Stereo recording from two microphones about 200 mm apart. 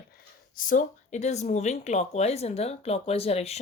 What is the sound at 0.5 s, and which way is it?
Speech, 40° left (ahead or behind).